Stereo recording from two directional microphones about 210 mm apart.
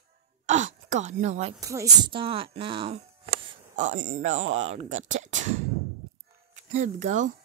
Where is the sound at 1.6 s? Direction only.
15° right (ahead or behind).